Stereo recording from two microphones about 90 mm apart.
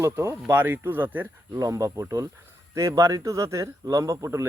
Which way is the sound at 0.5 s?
20° right (ahead or behind).